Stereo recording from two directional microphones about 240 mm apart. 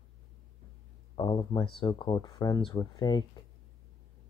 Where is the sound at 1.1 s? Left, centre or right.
Centre.